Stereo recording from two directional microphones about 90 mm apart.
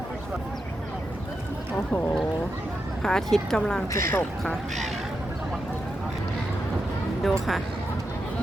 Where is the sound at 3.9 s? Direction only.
30° left (ahead or behind).